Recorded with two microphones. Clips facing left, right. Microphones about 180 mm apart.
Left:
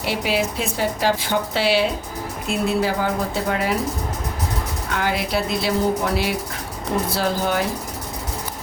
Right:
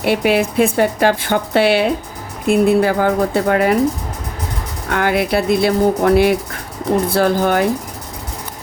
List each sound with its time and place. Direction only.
0.0 s speech: 60° right (ahead or behind)
4.9 s speech: 60° right (ahead or behind)